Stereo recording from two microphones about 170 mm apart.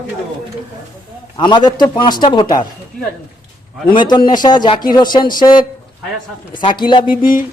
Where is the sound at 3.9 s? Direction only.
25° left (ahead or behind).